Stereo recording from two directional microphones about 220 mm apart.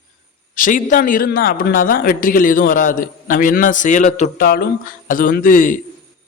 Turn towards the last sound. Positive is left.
turn(degrees=35)  # may be behind; listen again after turning